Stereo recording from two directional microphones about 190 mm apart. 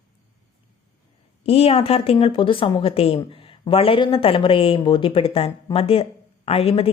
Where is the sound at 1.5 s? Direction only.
30° left (ahead or behind).